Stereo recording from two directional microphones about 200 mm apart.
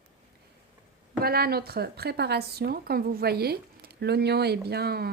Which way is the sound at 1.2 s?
50° right (ahead or behind).